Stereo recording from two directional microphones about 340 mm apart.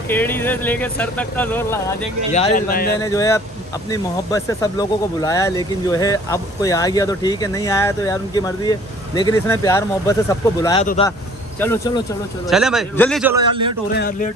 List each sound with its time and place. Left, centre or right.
0.1 s speech: centre
2.3 s speech: left
3.0 s speech: centre
13.5 s a man's voice: centre